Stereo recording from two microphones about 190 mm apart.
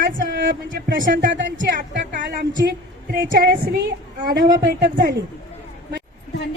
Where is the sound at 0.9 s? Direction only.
75° right (ahead or behind).